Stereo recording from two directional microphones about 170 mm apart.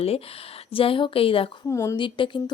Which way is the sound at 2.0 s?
30° left (ahead or behind).